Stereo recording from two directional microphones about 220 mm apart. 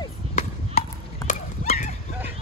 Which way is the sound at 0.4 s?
35° left (ahead or behind).